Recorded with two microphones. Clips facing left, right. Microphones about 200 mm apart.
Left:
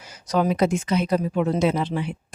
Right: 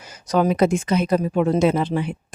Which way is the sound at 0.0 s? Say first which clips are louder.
Right 3 dB; 50° right (ahead or behind).